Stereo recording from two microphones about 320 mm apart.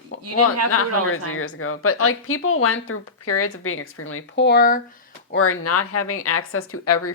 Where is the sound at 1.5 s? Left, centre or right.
Left.